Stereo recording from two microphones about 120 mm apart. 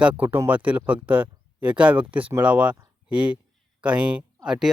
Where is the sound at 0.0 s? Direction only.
10° right (ahead or behind).